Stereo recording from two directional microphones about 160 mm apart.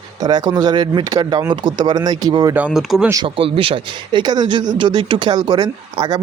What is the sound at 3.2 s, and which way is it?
Speech, 35° right (ahead or behind).